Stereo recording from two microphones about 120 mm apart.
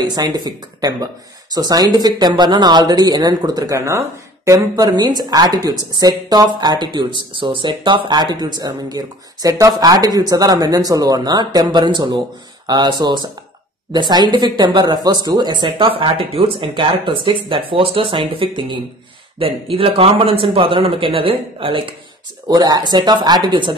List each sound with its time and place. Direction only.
0.0 s speech: 35° right (ahead or behind)
22.5 s speech: 35° right (ahead or behind)